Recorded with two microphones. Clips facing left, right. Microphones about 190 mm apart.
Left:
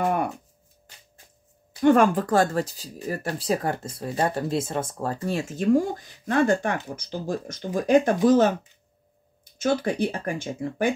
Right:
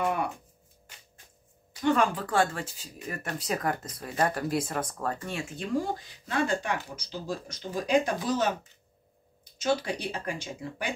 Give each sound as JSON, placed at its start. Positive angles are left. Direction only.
{"t": 0.0, "sound": "speech", "side_deg": 50}
{"t": 1.8, "sound": "speech", "side_deg": 50}